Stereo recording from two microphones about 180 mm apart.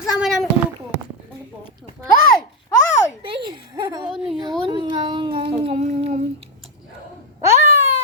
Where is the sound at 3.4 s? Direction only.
20° right (ahead or behind).